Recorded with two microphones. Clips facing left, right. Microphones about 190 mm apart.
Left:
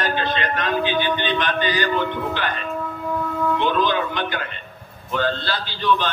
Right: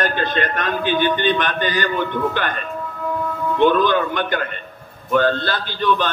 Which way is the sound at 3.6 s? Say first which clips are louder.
Right 8 dB; 50° right (ahead or behind).